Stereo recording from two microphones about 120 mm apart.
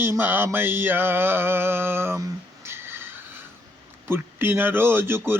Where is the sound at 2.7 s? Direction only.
20° right (ahead or behind).